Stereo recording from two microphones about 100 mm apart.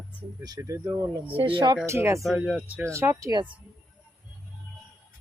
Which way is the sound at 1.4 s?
55° right (ahead or behind).